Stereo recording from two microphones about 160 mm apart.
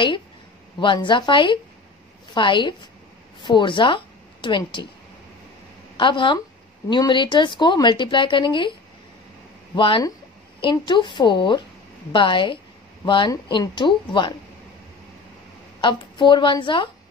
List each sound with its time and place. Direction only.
0.7 s a woman's voice: 30° left (ahead or behind)
5.9 s a woman's voice: 30° left (ahead or behind)
9.8 s a woman's voice: 30° left (ahead or behind)
15.8 s speech: 30° left (ahead or behind)